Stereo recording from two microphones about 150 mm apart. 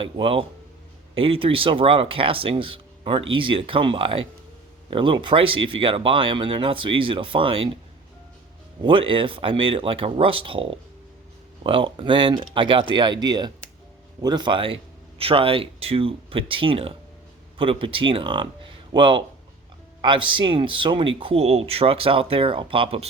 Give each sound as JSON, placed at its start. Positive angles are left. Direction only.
{"t": 0.0, "sound": "speech", "side_deg": -35}
{"t": 8.8, "sound": "speech", "side_deg": -35}